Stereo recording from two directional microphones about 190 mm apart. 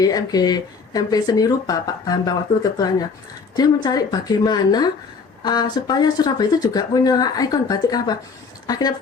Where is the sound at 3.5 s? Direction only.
20° left (ahead or behind).